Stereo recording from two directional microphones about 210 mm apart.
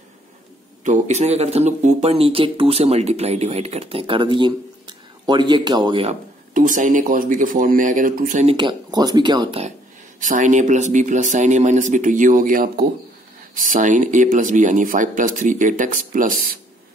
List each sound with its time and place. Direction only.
0.8 s speech: 35° right (ahead or behind)
6.5 s speech: 40° right (ahead or behind)
8.5 s speech: 20° right (ahead or behind)
10.2 s speech: 35° right (ahead or behind)